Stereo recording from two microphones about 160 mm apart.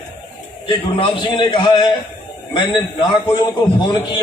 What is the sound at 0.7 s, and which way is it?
A man's voice, 30° left (ahead or behind).